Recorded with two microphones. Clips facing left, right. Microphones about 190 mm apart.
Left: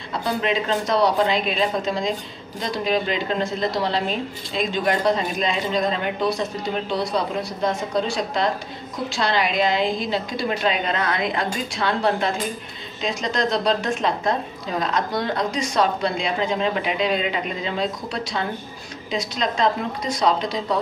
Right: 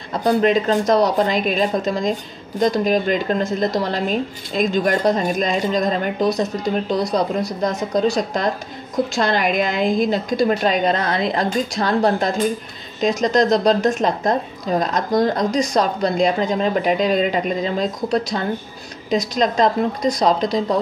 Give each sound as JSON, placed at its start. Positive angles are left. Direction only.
{"t": 0.2, "sound": "a woman's voice", "side_deg": -45}